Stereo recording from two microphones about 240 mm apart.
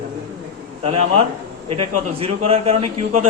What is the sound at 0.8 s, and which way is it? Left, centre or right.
Speech, right.